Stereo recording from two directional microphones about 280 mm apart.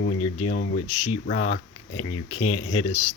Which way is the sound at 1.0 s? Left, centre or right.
Left.